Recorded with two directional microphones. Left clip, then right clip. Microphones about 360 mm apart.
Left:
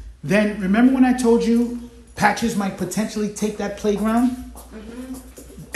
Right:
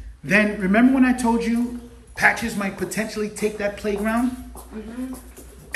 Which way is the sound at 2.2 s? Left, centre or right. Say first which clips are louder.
Even; centre.